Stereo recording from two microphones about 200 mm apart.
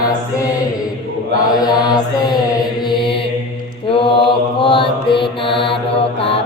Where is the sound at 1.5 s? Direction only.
20° left (ahead or behind).